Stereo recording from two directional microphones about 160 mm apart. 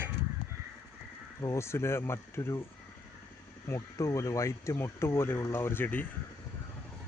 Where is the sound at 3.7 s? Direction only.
20° left (ahead or behind).